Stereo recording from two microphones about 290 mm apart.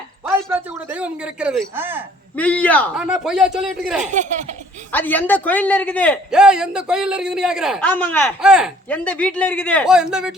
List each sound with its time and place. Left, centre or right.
0.3 s a man's voice: centre
2.3 s a man's voice: centre
4.0 s speech: right
4.9 s a man's voice: centre